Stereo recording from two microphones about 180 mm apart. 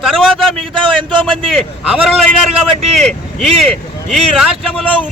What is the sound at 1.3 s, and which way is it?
Speech, centre (ahead or behind).